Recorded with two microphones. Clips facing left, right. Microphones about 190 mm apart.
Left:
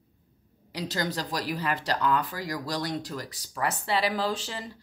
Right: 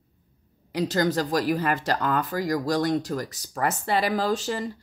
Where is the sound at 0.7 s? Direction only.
50° right (ahead or behind).